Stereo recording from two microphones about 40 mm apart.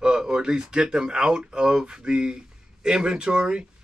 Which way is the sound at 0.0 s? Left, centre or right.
Centre.